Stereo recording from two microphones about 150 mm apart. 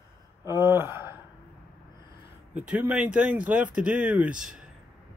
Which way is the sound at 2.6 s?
5° right (ahead or behind).